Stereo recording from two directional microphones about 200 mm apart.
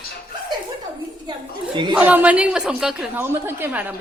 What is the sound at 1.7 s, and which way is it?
Speech, 20° right (ahead or behind).